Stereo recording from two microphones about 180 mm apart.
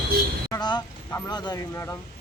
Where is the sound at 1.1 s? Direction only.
20° left (ahead or behind).